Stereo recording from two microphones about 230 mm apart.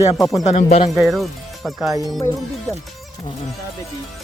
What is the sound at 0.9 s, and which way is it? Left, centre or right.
Speech, centre.